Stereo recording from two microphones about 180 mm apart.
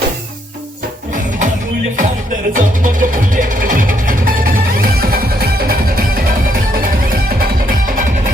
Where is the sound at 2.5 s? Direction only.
45° right (ahead or behind).